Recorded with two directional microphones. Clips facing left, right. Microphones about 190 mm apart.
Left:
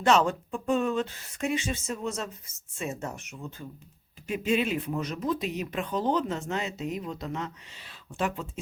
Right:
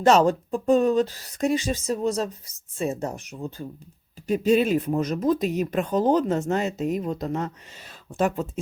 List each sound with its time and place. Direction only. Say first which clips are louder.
0.0 s speech: right 5 dB; 40° right (ahead or behind)